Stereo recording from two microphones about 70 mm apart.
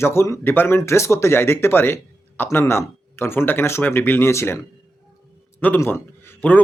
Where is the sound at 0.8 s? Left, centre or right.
Left.